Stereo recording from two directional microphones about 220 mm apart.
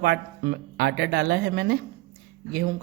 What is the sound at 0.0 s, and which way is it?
Speech, 50° right (ahead or behind).